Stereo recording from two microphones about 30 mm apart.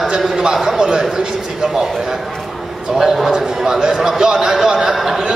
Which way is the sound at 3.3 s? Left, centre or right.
Centre.